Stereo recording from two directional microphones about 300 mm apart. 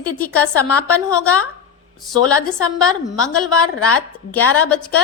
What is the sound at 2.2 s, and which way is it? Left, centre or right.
A woman's voice, centre.